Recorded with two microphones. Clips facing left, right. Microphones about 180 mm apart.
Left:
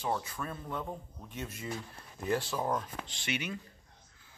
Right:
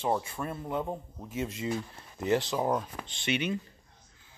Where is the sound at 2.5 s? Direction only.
15° right (ahead or behind).